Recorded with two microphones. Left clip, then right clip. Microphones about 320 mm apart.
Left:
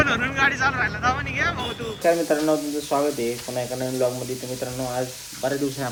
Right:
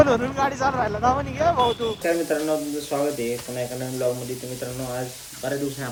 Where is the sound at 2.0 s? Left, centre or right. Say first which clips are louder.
Left 8 dB; centre.